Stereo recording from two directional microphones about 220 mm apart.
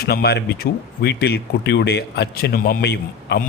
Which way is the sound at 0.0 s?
45° left (ahead or behind).